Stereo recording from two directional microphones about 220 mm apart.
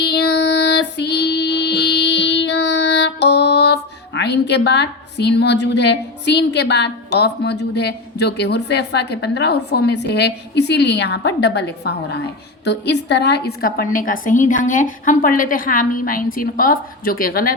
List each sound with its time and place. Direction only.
0.0 s child singing: 50° left (ahead or behind)